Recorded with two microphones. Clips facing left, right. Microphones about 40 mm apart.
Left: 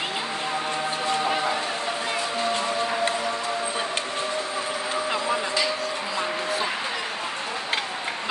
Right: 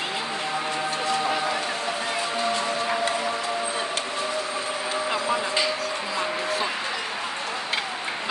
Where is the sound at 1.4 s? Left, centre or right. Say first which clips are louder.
Left 1 dB; centre.